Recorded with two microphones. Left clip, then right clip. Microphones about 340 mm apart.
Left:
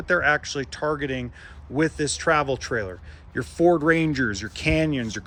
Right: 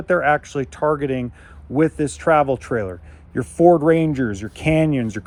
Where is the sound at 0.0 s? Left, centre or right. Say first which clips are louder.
Right 4 dB; centre.